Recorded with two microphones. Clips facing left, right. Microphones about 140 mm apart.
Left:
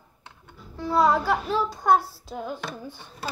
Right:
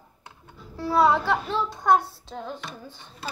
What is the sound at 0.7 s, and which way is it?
Speech, 5° right (ahead or behind).